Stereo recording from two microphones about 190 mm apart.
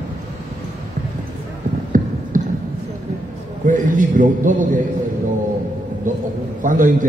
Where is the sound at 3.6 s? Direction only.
45° right (ahead or behind).